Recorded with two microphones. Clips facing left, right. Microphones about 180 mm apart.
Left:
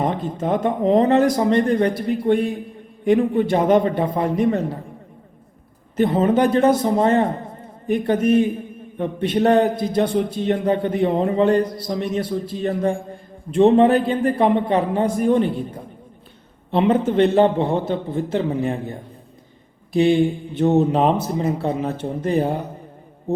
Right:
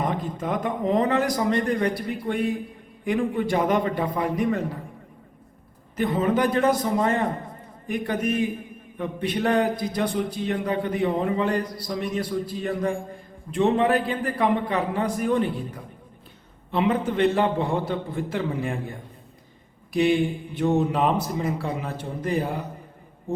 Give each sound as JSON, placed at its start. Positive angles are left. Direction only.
{"t": 0.0, "sound": "a man's voice", "side_deg": 30}
{"t": 6.0, "sound": "a man's voice", "side_deg": 25}